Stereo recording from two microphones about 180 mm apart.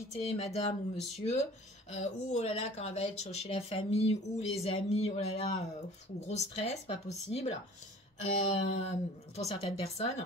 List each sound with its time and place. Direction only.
0.2 s speech: 35° left (ahead or behind)